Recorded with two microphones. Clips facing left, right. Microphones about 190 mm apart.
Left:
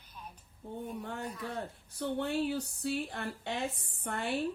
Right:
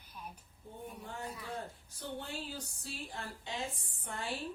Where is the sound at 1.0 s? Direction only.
65° left (ahead or behind).